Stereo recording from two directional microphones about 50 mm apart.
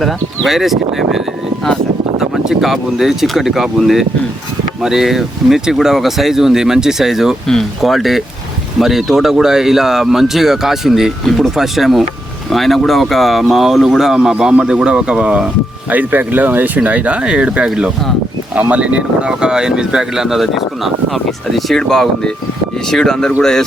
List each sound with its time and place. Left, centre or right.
0.0 s speech: centre; by 15.4 s right
15.9 s speech: right
18.7 s speech: right; by 21.8 s centre
21.8 s speech: centre